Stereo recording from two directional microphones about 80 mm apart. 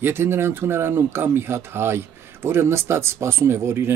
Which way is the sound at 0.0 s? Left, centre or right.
Right.